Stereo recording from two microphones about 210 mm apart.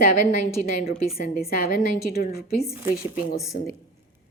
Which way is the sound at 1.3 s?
45° left (ahead or behind).